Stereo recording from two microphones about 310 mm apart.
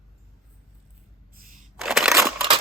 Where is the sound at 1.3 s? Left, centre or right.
Right.